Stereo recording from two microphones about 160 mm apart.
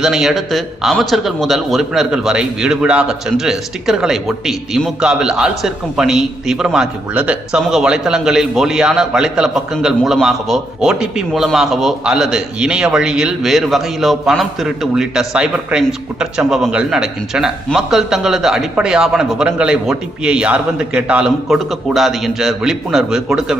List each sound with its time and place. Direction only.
0.0 s a man's voice: centre (ahead or behind)